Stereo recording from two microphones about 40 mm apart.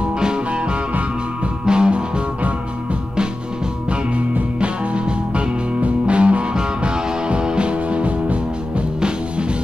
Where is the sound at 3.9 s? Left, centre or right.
Right.